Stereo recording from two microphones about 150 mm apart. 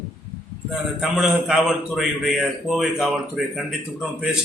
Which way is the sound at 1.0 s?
5° right (ahead or behind).